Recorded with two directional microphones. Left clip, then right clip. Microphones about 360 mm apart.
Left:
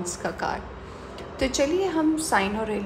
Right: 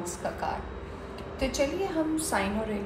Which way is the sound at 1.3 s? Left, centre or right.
Left.